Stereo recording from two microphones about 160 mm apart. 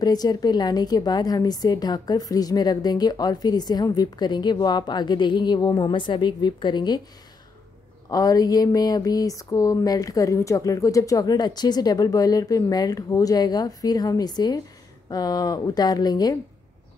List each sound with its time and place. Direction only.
0.0 s a woman's voice: 25° left (ahead or behind)
8.1 s a woman's voice: 25° left (ahead or behind)